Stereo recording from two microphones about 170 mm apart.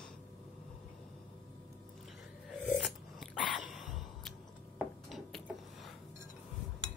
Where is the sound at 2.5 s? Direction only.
Centre (ahead or behind).